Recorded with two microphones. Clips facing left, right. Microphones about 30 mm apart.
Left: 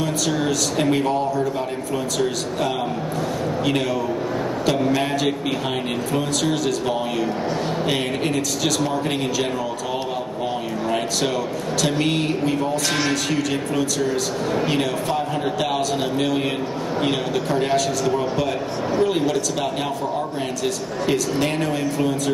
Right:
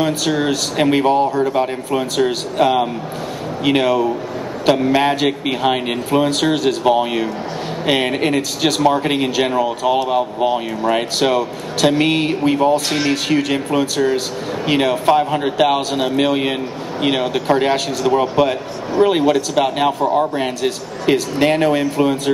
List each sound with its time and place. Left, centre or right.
0.0 s a man's voice: right